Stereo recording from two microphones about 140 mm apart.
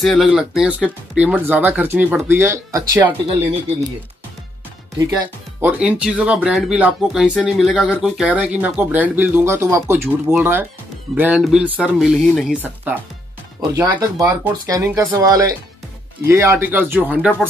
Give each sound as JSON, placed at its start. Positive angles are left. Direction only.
{"t": 0.0, "sound": "speech", "side_deg": 0}
{"t": 4.9, "sound": "speech", "side_deg": -30}
{"t": 5.6, "sound": "speech", "side_deg": -10}
{"t": 12.6, "sound": "speech", "side_deg": -15}
{"t": 13.6, "sound": "speech", "side_deg": -25}